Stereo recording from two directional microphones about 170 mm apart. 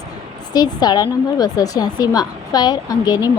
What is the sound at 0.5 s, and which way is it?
Speech, 25° left (ahead or behind).